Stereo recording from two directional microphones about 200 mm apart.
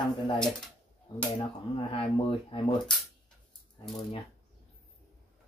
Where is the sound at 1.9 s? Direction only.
25° left (ahead or behind).